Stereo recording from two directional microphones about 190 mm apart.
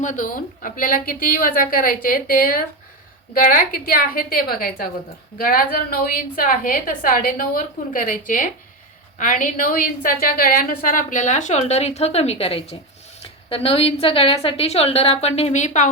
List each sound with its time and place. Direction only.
0.0 s a woman's voice: 40° left (ahead or behind)